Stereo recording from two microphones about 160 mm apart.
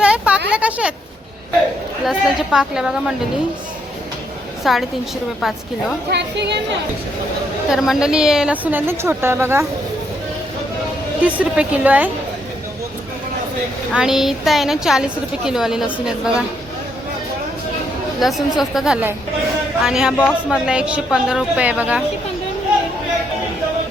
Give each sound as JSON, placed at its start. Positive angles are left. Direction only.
{"t": 0.0, "sound": "a sound", "side_deg": -5}
{"t": 2.0, "sound": "a woman's voice", "side_deg": -5}
{"t": 4.6, "sound": "a woman's voice", "side_deg": 0}
{"t": 6.1, "sound": "a woman's voice", "side_deg": -90}
{"t": 7.7, "sound": "a woman's voice", "side_deg": 0}
{"t": 11.2, "sound": "a woman's voice", "side_deg": -10}
{"t": 13.9, "sound": "a woman's voice", "side_deg": -5}
{"t": 18.2, "sound": "a woman's voice", "side_deg": 0}